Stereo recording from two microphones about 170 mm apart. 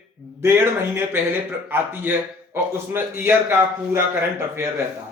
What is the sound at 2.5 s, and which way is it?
A man's voice, 15° right (ahead or behind).